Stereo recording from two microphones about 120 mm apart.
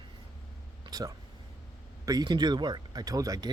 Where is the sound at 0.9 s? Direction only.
35° right (ahead or behind).